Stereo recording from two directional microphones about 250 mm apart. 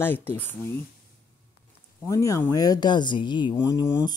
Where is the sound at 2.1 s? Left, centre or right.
Centre.